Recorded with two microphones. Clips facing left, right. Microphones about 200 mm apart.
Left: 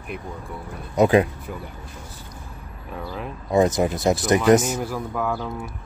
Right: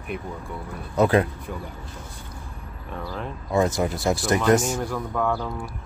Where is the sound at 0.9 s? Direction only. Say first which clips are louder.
Left 3 dB; 15° left (ahead or behind).